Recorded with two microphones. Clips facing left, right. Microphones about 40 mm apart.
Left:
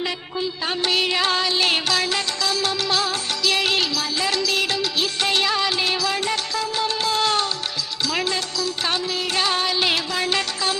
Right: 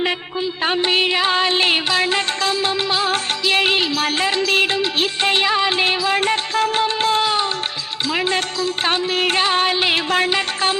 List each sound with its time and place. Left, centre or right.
0.6 s music: right
1.5 s music: right
7.2 s music: centre
8.3 s music: right